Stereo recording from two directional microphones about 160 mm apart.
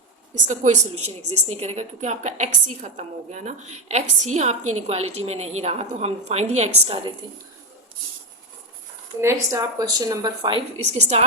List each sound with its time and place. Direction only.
0.4 s a woman's voice: 50° right (ahead or behind)
9.2 s a woman's voice: 20° right (ahead or behind)
11.1 s a woman's voice: 45° right (ahead or behind)